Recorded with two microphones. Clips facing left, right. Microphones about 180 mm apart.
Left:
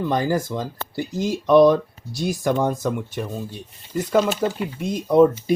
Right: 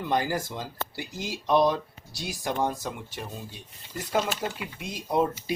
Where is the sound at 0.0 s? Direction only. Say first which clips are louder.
Left 6 dB; 45° left (ahead or behind).